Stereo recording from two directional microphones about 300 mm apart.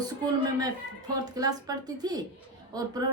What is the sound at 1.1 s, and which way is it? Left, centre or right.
A woman's voice, centre.